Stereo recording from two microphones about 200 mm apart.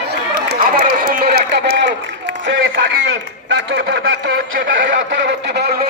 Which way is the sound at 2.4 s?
70° right (ahead or behind).